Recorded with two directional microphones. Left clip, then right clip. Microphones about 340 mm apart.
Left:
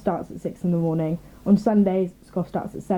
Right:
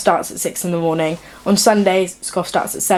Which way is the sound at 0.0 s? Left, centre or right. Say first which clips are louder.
Right 10 dB; centre.